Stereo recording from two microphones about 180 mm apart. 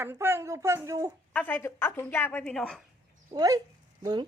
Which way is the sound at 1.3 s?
10° left (ahead or behind).